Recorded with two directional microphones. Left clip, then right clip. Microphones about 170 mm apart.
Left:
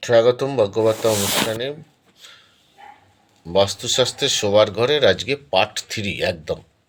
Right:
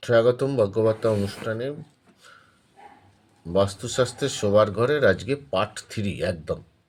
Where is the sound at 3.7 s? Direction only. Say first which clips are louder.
Left 5 dB; 15° right (ahead or behind).